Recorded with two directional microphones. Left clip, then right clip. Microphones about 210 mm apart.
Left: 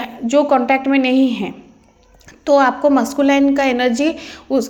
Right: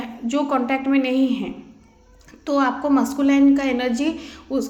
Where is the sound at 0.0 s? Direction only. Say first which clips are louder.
Left 9 dB; 30° left (ahead or behind).